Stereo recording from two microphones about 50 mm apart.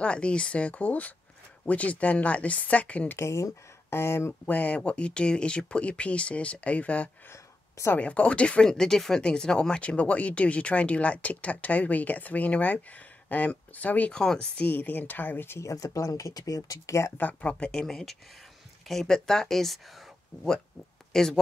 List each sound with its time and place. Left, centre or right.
0.0 s speech: left
3.2 s speech: left
4.5 s speech: left
8.6 s speech: centre; by 14.1 s left
14.1 s speech: centre
14.6 s speech: left
15.6 s speech: left
16.8 s speech: left
17.4 s speech: left; by 19.8 s centre
21.1 s speech: centre